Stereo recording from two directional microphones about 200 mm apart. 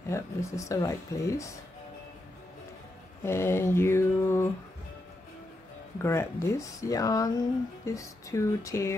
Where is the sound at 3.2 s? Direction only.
10° left (ahead or behind).